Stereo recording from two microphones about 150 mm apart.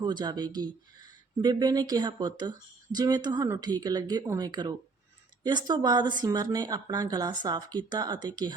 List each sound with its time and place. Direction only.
0.0 s speech: 30° right (ahead or behind)